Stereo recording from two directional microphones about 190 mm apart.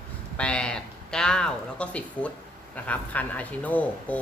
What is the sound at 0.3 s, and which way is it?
Speech, 5° left (ahead or behind).